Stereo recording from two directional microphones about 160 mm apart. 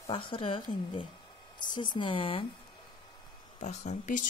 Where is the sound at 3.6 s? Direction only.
45° left (ahead or behind).